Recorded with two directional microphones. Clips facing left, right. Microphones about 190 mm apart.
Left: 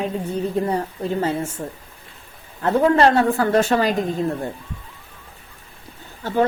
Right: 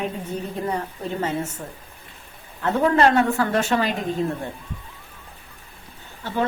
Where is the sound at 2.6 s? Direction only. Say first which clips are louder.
Left 3 dB; 35° left (ahead or behind).